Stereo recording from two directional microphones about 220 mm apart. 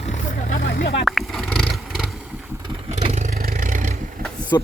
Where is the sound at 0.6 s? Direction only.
50° left (ahead or behind).